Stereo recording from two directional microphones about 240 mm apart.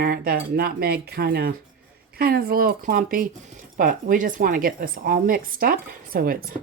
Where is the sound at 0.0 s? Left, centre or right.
Right.